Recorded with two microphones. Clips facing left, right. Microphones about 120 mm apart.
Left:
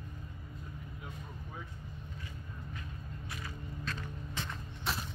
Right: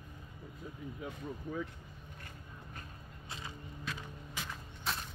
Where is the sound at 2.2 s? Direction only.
55° right (ahead or behind).